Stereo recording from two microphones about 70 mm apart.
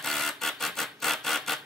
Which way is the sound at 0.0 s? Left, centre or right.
Centre.